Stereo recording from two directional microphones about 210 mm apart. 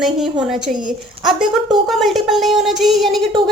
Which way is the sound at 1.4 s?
Centre (ahead or behind).